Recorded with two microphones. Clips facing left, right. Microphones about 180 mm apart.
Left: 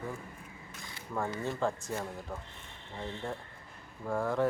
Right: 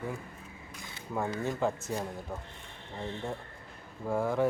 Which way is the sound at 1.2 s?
15° right (ahead or behind).